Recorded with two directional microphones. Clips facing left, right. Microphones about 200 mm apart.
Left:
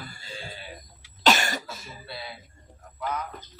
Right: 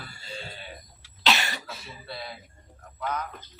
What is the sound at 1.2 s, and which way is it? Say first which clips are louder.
Cough: left 4 dB; 45° left (ahead or behind).